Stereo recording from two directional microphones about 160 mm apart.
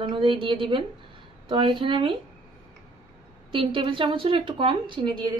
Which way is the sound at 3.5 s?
30° right (ahead or behind).